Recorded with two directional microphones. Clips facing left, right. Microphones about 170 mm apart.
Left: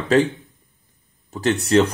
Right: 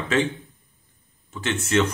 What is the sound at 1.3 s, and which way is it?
Speech, 40° left (ahead or behind).